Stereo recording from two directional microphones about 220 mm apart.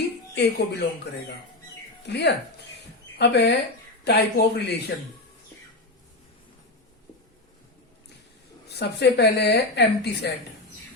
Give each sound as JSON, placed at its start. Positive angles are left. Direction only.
{"t": 0.3, "sound": "a woman's voice", "side_deg": 50}
{"t": 2.0, "sound": "a woman's voice", "side_deg": 50}
{"t": 8.7, "sound": "a woman's voice", "side_deg": 50}